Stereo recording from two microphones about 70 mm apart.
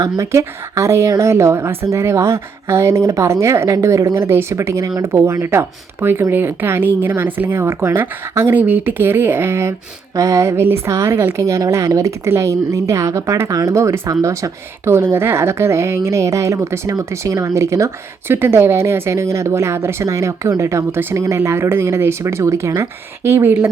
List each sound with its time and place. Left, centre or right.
0.3 s speech: right
10.2 s speech: right
14.1 s speech: right
14.8 s speech: right
16.9 s speech: right
18.3 s speech: right